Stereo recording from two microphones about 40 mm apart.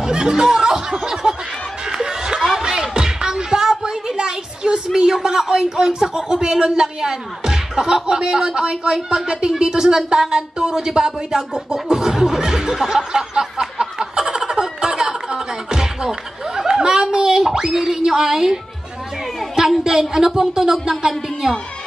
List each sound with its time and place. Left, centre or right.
0.0 s speech: centre
1.9 s snicker: centre
2.6 s music: centre
3.8 s a sound: centre
4.9 s a man's voice: centre
19.8 s speech: centre